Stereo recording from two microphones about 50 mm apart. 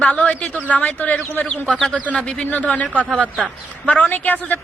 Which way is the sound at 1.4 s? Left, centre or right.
Centre.